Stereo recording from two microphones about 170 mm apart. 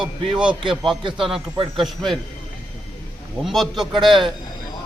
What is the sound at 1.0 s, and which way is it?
Speech, 30° right (ahead or behind).